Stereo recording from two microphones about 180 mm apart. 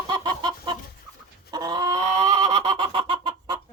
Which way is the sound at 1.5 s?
20° right (ahead or behind).